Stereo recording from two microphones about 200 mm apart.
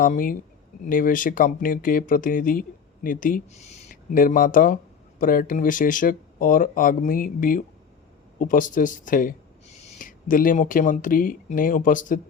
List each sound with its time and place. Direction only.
0.0 s speech: 45° left (ahead or behind)